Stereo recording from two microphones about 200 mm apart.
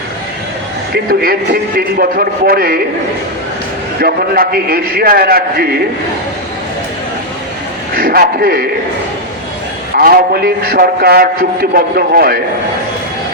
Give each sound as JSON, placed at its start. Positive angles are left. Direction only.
{"t": 0.9, "sound": "a man's voice", "side_deg": -45}
{"t": 4.0, "sound": "a man's voice", "side_deg": -50}
{"t": 7.9, "sound": "speech", "side_deg": -45}
{"t": 9.9, "sound": "a man's voice", "side_deg": -50}